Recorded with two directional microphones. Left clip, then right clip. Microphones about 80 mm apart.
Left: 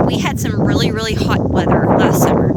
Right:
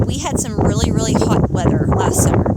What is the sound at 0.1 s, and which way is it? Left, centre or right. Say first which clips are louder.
Speech: left 3 dB; right.